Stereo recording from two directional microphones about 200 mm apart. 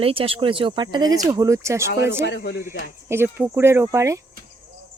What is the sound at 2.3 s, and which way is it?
Speech, 60° left (ahead or behind).